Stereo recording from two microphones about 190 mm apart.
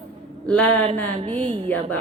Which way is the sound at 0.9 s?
35° right (ahead or behind).